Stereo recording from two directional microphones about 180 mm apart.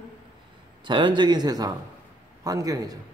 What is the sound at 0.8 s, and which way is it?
A man's voice, 25° right (ahead or behind).